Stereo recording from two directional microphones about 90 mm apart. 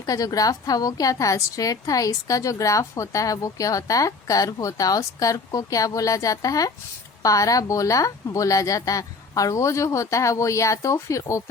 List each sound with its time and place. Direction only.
0.0 s a woman's voice: 40° left (ahead or behind)